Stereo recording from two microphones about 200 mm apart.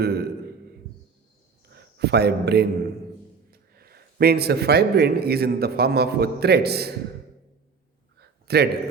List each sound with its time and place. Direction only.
0.0 s a man's voice: 55° right (ahead or behind)
1.7 s a man's voice: 55° right (ahead or behind)
8.2 s a sound: 55° right (ahead or behind)